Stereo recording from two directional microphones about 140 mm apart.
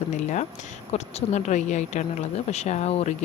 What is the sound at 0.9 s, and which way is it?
Speech, 55° left (ahead or behind).